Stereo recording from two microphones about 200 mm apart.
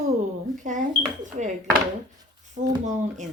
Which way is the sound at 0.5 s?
40° right (ahead or behind).